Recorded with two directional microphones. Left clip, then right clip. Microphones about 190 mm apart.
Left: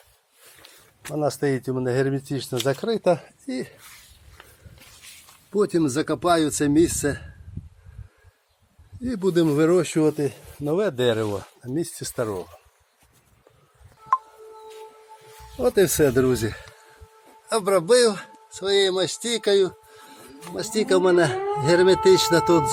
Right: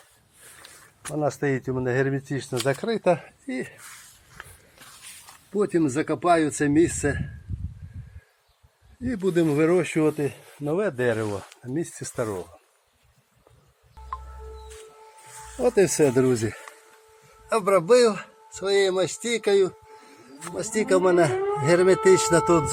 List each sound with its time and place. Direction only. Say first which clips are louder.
1.0 s speech: left 2 dB; 10° left (ahead or behind)
4.4 s a sound: right 6 dB; 10° left (ahead or behind)
5.5 s speech: left 2 dB; 15° left (ahead or behind)
9.0 s speech: left 2 dB; 15° left (ahead or behind)
11.3 s speech: left 2 dB; 10° left (ahead or behind)
15.5 s speech: left 1 dB; 10° left (ahead or behind)